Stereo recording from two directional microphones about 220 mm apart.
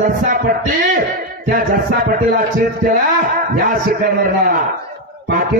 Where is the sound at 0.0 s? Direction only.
40° right (ahead or behind).